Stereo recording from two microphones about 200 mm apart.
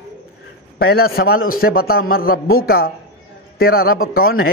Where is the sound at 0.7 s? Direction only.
50° left (ahead or behind).